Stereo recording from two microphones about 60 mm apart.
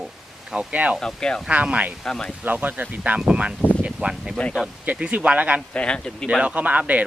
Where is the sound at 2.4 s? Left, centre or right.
Right.